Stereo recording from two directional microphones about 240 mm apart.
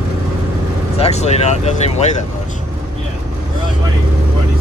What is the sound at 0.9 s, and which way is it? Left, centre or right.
Speech, left.